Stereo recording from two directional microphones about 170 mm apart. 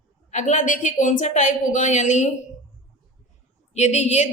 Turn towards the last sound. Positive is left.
turn(degrees=40)  # may be behind; listen again after turning